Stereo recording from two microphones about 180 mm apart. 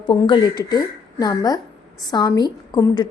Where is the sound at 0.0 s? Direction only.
25° left (ahead or behind).